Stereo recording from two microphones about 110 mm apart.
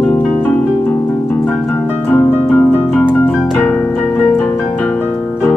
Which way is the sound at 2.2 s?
15° left (ahead or behind).